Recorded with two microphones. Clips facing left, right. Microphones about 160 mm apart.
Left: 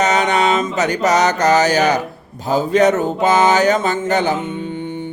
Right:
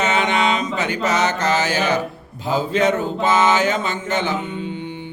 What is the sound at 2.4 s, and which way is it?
Speech, 40° left (ahead or behind).